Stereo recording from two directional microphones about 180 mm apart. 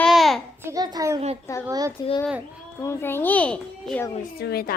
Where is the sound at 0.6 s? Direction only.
20° right (ahead or behind).